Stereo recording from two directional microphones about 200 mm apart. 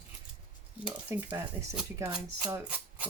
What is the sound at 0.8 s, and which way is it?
Speech, 5° right (ahead or behind).